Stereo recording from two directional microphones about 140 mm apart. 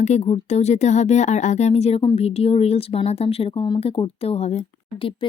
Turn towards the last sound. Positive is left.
turn(degrees=50)  # may be behind; listen again after turning